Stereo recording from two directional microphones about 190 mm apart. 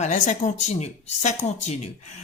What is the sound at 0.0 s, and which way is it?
Speech, 40° left (ahead or behind).